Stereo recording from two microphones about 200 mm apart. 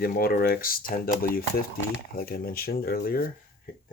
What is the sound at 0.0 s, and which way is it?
Speech, 50° left (ahead or behind).